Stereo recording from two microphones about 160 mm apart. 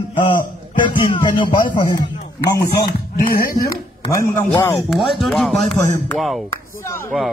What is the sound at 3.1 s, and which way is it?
Speech, 65° left (ahead or behind).